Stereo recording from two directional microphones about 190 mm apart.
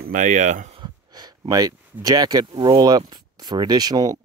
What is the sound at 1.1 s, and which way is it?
Speech, 20° right (ahead or behind).